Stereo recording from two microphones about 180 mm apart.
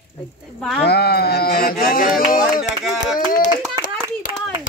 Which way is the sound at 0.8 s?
60° left (ahead or behind).